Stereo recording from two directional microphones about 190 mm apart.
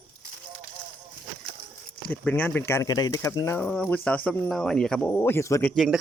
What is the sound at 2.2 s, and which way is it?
Speech, 10° left (ahead or behind).